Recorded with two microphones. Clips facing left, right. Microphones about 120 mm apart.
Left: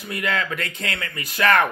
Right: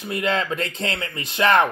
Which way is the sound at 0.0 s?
25° right (ahead or behind).